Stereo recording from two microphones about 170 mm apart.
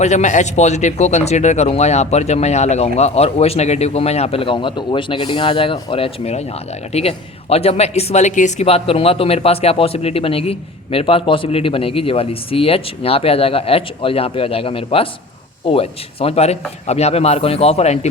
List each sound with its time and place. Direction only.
0.0 s speech: 45° left (ahead or behind)